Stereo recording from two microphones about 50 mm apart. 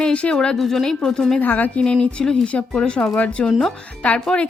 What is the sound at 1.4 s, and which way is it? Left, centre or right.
Speech, left.